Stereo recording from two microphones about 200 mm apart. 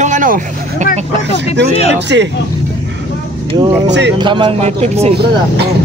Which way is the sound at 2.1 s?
60° right (ahead or behind).